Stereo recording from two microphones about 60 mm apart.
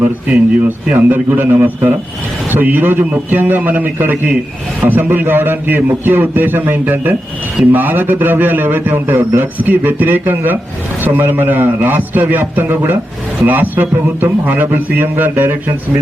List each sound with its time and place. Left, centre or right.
0.0 s a man's voice: right